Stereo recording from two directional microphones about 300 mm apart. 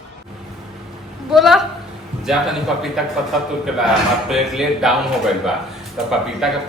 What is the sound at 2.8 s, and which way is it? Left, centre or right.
Speech, centre.